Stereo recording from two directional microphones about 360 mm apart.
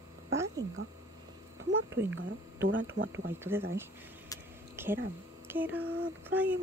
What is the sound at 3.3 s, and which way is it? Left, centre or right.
Speech, centre.